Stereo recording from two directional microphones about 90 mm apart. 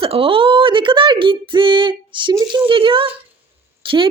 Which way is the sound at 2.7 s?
75° right (ahead or behind).